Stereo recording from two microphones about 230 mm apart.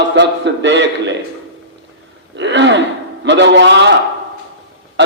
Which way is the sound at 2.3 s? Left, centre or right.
Right.